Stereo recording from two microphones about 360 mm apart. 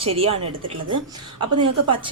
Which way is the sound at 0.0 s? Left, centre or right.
Centre.